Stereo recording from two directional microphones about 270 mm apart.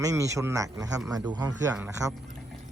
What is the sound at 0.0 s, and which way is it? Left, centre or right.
Speech, centre.